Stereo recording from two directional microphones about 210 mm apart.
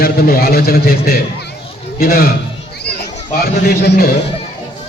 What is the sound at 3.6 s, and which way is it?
Speech, 50° left (ahead or behind).